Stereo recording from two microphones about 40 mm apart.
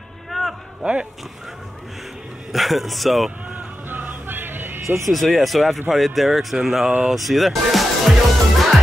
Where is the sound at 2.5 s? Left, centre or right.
Centre.